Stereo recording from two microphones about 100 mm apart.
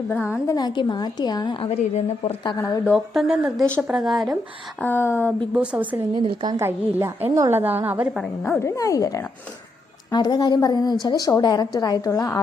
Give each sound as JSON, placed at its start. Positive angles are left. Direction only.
{"t": 0.1, "sound": "a sound", "side_deg": 25}
{"t": 0.5, "sound": "a woman's voice", "side_deg": 45}
{"t": 1.6, "sound": "a woman's voice", "side_deg": 60}
{"t": 2.9, "sound": "speech", "side_deg": -5}
{"t": 4.8, "sound": "a sound", "side_deg": 20}
{"t": 5.5, "sound": "a woman's voice", "side_deg": -15}
{"t": 6.2, "sound": "a woman's voice", "side_deg": -45}
{"t": 6.6, "sound": "a woman's voice", "side_deg": -25}
{"t": 7.6, "sound": "a woman's voice", "side_deg": -20}
{"t": 8.4, "sound": "a woman's voice", "side_deg": 25}
{"t": 10.1, "sound": "a woman's voice", "side_deg": 45}